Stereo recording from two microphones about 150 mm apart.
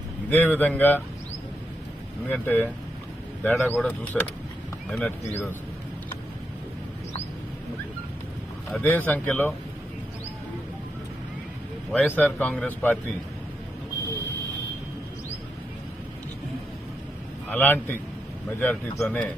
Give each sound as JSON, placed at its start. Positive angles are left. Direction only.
{"t": 0.3, "sound": "a man's voice", "side_deg": 10}
{"t": 2.3, "sound": "a man's voice", "side_deg": 10}
{"t": 8.7, "sound": "a man's voice", "side_deg": 10}
{"t": 11.9, "sound": "a man's voice", "side_deg": 10}
{"t": 17.5, "sound": "a man's voice", "side_deg": 10}